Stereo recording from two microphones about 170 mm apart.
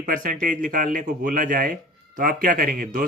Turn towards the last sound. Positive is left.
turn(degrees=-55)  # may be behind; listen again after turning